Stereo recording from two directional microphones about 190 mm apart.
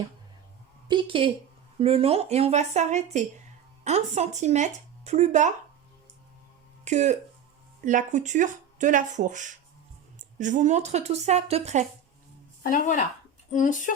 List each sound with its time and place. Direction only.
0.9 s a woman's voice: 25° right (ahead or behind)
6.8 s speech: 35° right (ahead or behind)
12.6 s speech: 45° left (ahead or behind)